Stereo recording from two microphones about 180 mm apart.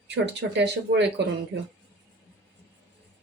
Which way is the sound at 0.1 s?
75° right (ahead or behind).